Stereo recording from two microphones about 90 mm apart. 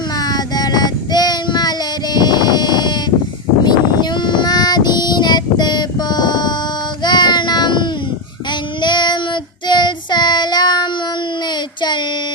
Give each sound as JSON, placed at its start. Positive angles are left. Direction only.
{"t": 0.2, "sound": "child singing", "side_deg": 45}
{"t": 2.1, "sound": "a sound", "side_deg": 50}
{"t": 3.6, "sound": "child singing", "side_deg": 55}